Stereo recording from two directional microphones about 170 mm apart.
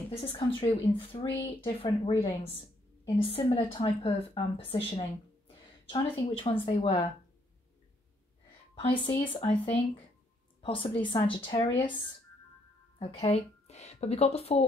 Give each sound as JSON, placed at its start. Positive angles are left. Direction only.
{"t": 0.2, "sound": "a woman's voice", "side_deg": 30}
{"t": 8.8, "sound": "a woman's voice", "side_deg": 30}